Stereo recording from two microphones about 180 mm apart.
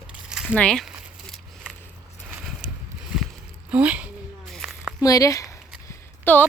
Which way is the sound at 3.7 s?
10° right (ahead or behind).